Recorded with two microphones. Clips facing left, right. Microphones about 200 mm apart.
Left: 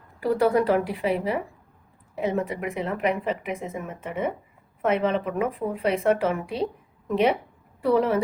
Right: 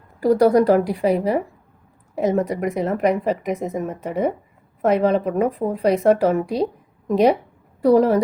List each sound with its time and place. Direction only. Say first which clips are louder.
0.2 s a woman's voice: right 6 dB; 40° right (ahead or behind)